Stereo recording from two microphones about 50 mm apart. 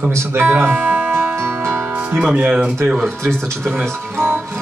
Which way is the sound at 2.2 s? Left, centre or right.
Right.